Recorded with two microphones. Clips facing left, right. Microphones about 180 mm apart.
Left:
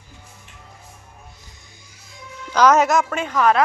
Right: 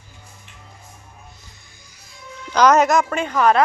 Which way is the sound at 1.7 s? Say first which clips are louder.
Left 1 dB; 25° left (ahead or behind).